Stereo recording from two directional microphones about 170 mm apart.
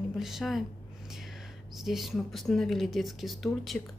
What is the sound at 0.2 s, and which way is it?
Speech, centre (ahead or behind).